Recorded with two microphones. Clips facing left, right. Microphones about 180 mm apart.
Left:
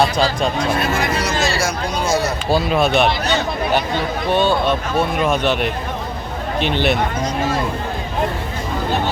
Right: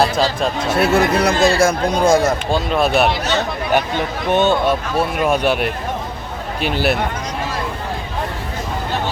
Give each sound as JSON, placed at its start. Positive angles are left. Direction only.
{"t": 0.0, "sound": "speech", "side_deg": 0}
{"t": 0.8, "sound": "speech", "side_deg": -65}
{"t": 2.5, "sound": "speech", "side_deg": 0}
{"t": 4.3, "sound": "speech", "side_deg": -20}
{"t": 4.7, "sound": "speech", "side_deg": -5}